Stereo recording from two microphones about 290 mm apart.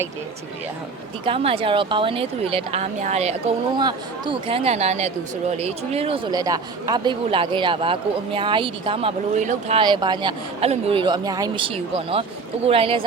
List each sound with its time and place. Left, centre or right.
1.2 s speech: centre